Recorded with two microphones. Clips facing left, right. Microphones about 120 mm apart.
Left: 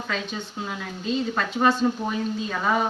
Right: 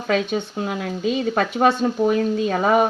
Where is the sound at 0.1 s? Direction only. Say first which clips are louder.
Right 12 dB; 65° right (ahead or behind).